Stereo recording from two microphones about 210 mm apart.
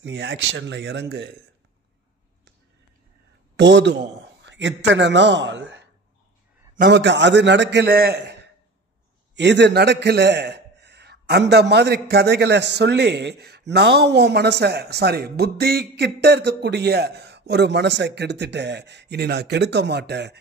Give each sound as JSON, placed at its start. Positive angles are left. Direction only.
{"t": 0.0, "sound": "a man's voice", "side_deg": -55}
{"t": 3.5, "sound": "a man's voice", "side_deg": -60}